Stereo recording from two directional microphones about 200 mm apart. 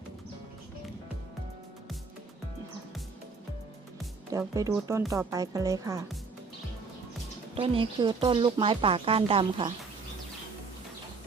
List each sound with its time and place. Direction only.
4.3 s speech: 15° right (ahead or behind)
7.5 s speech: 25° right (ahead or behind)